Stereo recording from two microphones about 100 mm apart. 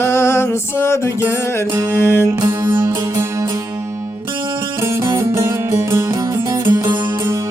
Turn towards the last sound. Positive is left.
turn(degrees=-25)  # may be behind; listen again after turning